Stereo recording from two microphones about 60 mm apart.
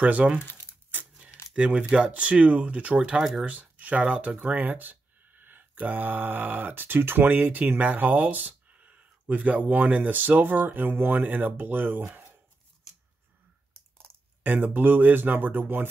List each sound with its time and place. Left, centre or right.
0.0 s speech: right
0.4 s crumpling: left
1.5 s speech: centre; by 12.4 s right
14.4 s speech: right